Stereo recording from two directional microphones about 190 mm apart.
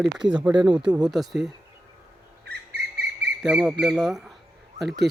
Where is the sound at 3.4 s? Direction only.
5° right (ahead or behind).